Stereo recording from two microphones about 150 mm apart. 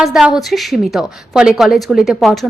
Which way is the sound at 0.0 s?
5° right (ahead or behind).